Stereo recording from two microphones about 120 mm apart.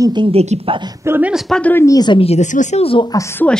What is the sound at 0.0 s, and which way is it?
Speech, 40° right (ahead or behind).